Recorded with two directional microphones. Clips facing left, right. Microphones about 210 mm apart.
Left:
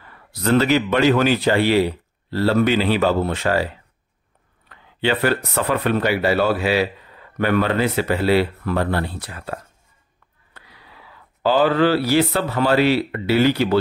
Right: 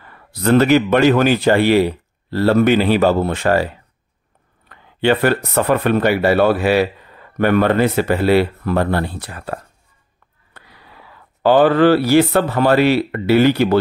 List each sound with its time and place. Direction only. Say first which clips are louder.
0.4 s speech: right 4 dB; 55° right (ahead or behind)
4.6 s speech: right 5 dB; 50° right (ahead or behind)
11.4 s speech: right 5 dB; 55° right (ahead or behind)